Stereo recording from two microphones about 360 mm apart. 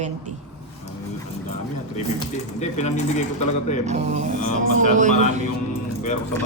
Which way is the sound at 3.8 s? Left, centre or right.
Centre.